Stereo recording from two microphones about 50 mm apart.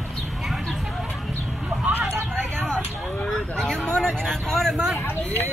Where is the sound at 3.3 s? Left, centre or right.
Centre.